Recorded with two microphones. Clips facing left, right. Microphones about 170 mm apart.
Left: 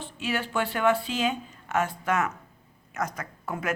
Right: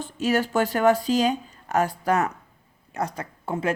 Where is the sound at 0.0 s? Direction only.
40° right (ahead or behind).